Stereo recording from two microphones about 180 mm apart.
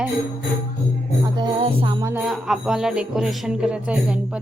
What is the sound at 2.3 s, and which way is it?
Speech, 5° right (ahead or behind).